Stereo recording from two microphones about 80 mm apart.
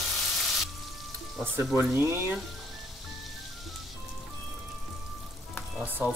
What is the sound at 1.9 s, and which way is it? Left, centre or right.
Speech, right.